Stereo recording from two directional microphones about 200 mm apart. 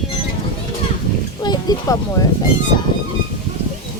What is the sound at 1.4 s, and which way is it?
Speech, 20° left (ahead or behind).